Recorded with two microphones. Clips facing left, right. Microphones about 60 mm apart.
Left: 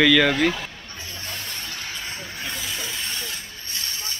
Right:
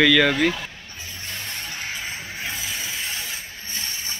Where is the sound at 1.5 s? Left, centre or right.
Centre.